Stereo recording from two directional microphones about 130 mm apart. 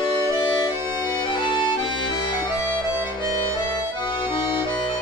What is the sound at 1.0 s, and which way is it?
Music, 35° left (ahead or behind).